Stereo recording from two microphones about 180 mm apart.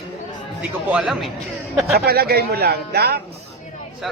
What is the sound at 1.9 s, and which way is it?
Speech, 60° right (ahead or behind).